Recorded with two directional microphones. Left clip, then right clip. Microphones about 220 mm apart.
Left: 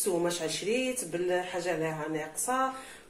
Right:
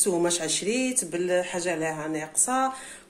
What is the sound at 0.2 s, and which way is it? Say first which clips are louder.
Speech: right 5 dB; 45° right (ahead or behind).